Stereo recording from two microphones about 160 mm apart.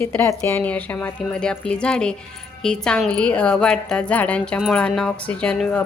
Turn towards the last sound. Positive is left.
turn(degrees=10)  # may be behind; listen again after turning